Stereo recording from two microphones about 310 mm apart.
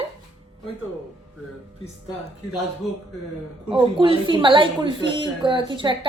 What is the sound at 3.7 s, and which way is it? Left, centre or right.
A woman's voice, centre.